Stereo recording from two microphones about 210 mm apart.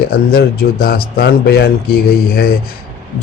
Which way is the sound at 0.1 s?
45° left (ahead or behind).